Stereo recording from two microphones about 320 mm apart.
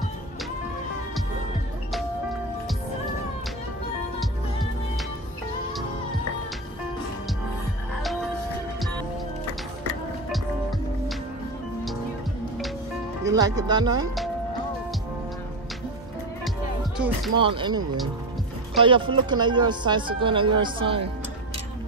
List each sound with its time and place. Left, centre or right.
13.2 s speech: centre
16.9 s music: centre
17.4 s speech: centre